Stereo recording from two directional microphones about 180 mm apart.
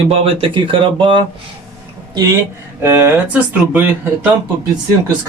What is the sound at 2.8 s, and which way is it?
Speech, 15° right (ahead or behind).